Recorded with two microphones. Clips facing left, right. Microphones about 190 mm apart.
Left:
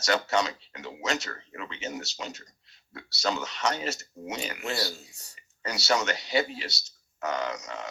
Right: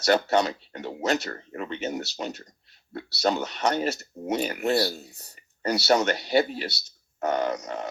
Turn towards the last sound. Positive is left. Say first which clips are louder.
# right 5 dB
turn(degrees=-55)  # may be behind; listen again after turning